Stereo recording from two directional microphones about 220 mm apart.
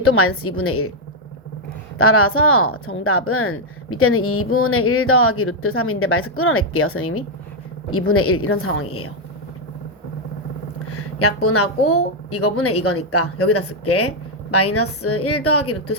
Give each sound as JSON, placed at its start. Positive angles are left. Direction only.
{"t": 0.0, "sound": "a woman's voice", "side_deg": 70}
{"t": 2.0, "sound": "a woman's voice", "side_deg": 75}
{"t": 10.8, "sound": "a woman's voice", "side_deg": 90}